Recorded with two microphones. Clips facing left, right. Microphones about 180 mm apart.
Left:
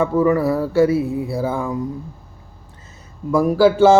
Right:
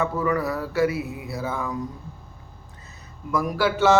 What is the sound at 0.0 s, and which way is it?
Mantra, 25° left (ahead or behind).